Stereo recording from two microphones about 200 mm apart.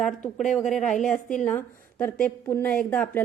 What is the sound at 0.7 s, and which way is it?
A woman's voice, centre (ahead or behind).